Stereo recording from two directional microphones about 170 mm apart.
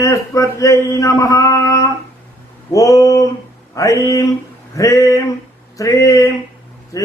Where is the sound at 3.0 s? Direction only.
20° left (ahead or behind).